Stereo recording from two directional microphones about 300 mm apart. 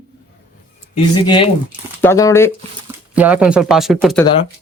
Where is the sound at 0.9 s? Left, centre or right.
Centre.